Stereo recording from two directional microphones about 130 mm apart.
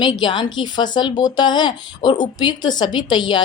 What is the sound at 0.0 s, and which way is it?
A woman's voice, 35° left (ahead or behind).